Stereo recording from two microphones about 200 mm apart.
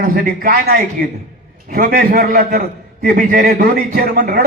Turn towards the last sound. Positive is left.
turn(degrees=-45)  # may be behind; listen again after turning